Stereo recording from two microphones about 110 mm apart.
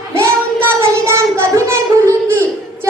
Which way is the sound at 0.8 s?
25° right (ahead or behind).